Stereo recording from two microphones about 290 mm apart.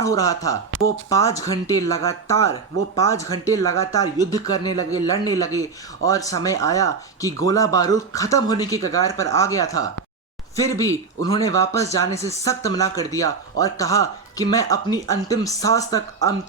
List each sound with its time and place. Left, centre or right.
0.0 s speech: centre
0.7 s speech: right
1.1 s speech: centre